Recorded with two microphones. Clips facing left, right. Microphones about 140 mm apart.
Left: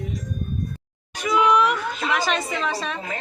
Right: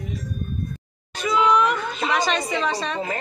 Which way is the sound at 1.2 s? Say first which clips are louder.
Even; 15° left (ahead or behind).